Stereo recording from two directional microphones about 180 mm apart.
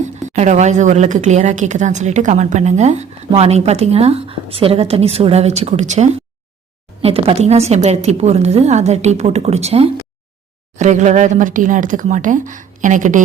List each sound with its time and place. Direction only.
0.0 s a woman's voice: 40° right (ahead or behind)